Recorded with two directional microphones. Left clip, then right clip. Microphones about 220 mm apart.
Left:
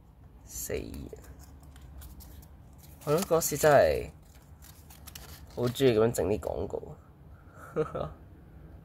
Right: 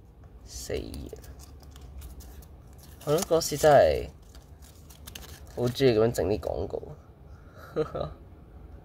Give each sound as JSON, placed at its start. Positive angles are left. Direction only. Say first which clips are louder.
{"t": 0.7, "sound": "speech", "louder": "right 2 dB", "side_deg": 0}
{"t": 3.1, "sound": "speech", "louder": "right 2 dB", "side_deg": 0}
{"t": 5.5, "sound": "speech", "louder": "right 2 dB", "side_deg": 0}